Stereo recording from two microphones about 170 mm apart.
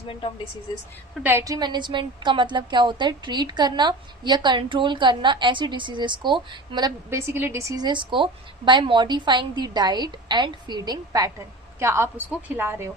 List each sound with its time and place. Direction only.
0.1 s speech: 30° left (ahead or behind)
1.2 s a woman's voice: 15° right (ahead or behind)